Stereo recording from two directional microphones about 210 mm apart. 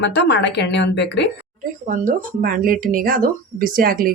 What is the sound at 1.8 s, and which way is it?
Speech, 40° right (ahead or behind).